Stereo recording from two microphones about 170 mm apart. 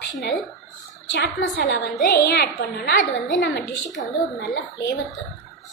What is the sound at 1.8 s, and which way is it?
Speech, 55° left (ahead or behind).